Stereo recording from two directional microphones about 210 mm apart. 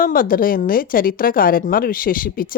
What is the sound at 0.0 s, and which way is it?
Speech, 40° left (ahead or behind).